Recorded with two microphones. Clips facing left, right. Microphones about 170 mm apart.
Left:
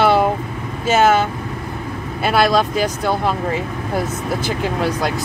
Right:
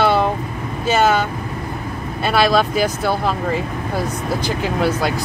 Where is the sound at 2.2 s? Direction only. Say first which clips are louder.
Even; centre (ahead or behind).